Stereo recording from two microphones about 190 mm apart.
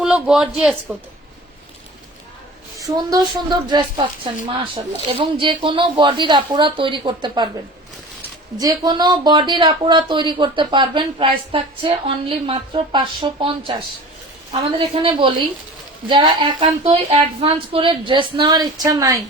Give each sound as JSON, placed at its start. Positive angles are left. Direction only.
{"t": 0.0, "sound": "a man's voice", "side_deg": -5}
{"t": 2.7, "sound": "speech", "side_deg": -20}
{"t": 8.5, "sound": "speech", "side_deg": -20}